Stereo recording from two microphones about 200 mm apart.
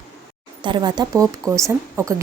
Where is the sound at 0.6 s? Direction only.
20° right (ahead or behind).